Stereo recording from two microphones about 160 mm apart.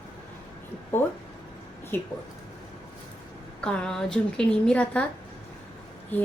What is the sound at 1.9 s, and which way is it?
Speech, 15° left (ahead or behind).